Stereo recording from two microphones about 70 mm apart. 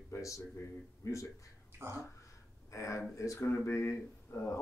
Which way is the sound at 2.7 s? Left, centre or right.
Left.